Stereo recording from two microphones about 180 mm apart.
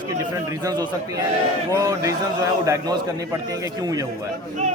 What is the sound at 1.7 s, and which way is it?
A man's voice, 20° right (ahead or behind).